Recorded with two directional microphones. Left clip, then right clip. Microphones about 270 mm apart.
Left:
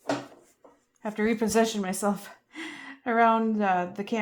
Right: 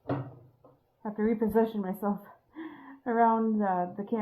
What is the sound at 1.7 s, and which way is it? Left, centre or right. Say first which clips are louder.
Speech: left 4 dB; left.